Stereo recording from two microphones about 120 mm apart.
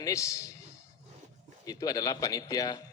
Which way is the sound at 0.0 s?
25° left (ahead or behind).